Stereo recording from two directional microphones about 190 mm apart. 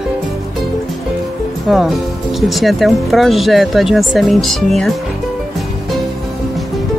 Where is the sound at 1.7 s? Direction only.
Centre (ahead or behind).